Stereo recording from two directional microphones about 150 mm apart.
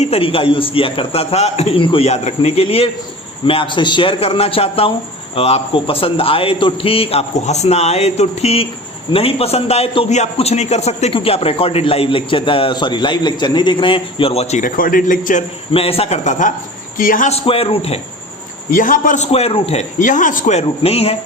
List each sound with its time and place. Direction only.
0.0 s a man's voice: 40° left (ahead or behind); by 15.4 s 60° left (ahead or behind)
15.7 s speech: 40° left (ahead or behind)
17.0 s a man's voice: 65° left (ahead or behind)
17.2 s a man's voice: 40° left (ahead or behind)
18.7 s speech: 65° left (ahead or behind); by 19.8 s 40° left (ahead or behind)
20.0 s speech: 60° left (ahead or behind); by 21.2 s 40° left (ahead or behind)